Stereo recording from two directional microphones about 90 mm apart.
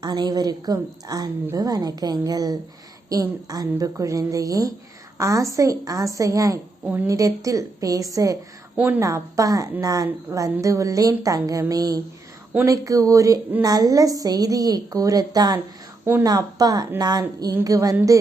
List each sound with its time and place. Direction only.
0.0 s a woman's voice: 50° right (ahead or behind)